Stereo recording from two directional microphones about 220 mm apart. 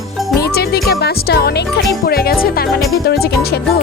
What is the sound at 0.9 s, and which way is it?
Speech, 45° left (ahead or behind).